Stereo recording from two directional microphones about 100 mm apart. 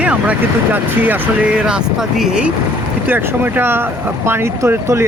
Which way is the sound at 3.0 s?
20° right (ahead or behind).